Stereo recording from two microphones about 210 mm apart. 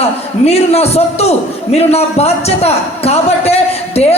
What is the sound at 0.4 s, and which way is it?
A man's voice, 30° left (ahead or behind).